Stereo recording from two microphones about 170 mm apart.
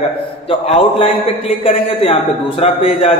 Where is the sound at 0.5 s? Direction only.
30° left (ahead or behind).